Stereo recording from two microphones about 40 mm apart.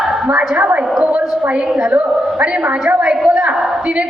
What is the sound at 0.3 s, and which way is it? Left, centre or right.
Speech, right.